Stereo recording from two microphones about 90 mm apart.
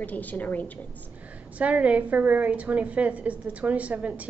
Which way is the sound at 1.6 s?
15° right (ahead or behind).